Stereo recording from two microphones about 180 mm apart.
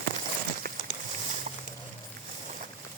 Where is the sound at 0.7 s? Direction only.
55° right (ahead or behind).